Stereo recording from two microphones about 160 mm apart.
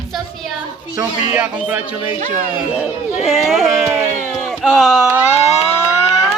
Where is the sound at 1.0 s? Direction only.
10° right (ahead or behind).